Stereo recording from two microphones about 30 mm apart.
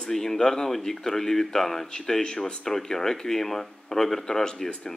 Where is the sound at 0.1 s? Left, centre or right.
Centre.